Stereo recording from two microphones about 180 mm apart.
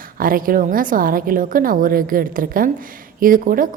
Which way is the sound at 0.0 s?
50° right (ahead or behind).